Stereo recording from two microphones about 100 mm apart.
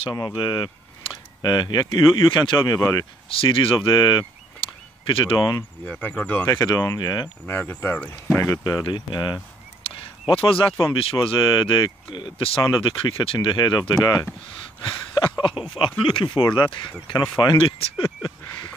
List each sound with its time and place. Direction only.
0.1 s speech: 45° left (ahead or behind)
3.3 s speech: 65° left (ahead or behind); by 4.3 s 45° left (ahead or behind)
4.6 s a sound: 60° left (ahead or behind)
5.4 s speech: 40° left (ahead or behind)
5.9 s speech: 15° left (ahead or behind)
6.4 s speech: 40° left (ahead or behind)
7.4 s speech: 20° left (ahead or behind)
8.6 s speech: 45° left (ahead or behind)
10.3 s speech: 60° left (ahead or behind)